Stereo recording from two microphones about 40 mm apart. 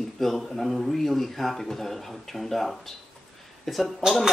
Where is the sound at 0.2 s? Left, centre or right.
Centre.